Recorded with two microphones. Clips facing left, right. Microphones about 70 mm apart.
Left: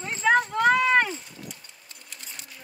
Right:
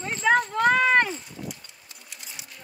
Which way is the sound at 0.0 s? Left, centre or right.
Centre.